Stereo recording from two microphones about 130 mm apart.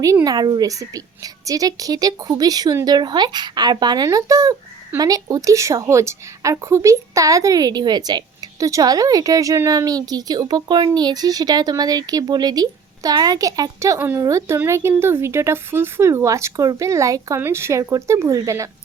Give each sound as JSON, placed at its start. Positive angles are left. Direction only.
{"t": 0.0, "sound": "a woman's voice", "side_deg": -25}